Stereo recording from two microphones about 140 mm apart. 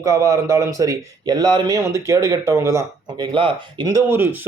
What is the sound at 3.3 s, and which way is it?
Speech, 35° right (ahead or behind).